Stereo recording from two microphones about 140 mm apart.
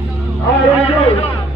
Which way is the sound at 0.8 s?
45° left (ahead or behind).